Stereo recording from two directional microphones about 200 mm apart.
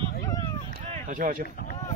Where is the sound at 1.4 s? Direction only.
45° left (ahead or behind).